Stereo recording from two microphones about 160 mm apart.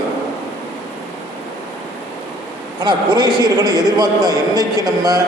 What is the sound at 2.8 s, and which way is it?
A man's voice, 25° right (ahead or behind).